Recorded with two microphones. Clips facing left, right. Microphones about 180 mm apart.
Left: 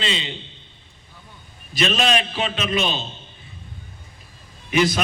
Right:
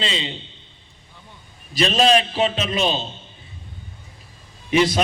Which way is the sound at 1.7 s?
35° right (ahead or behind).